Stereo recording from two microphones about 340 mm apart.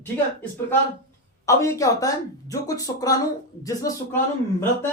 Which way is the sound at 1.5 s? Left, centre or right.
Centre.